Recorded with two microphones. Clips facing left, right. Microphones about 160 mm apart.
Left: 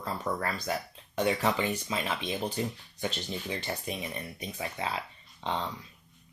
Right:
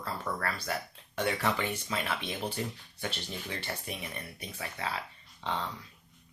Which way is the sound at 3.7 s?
15° left (ahead or behind).